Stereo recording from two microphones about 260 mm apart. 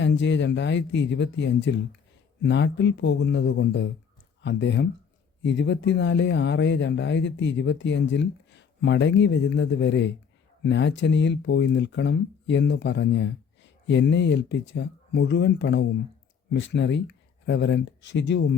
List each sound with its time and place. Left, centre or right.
0.0 s speech: left